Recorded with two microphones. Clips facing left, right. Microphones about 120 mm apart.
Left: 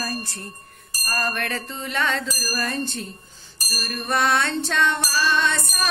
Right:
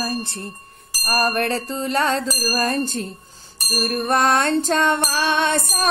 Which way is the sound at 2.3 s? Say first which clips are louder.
Right 6 dB; 50° right (ahead or behind).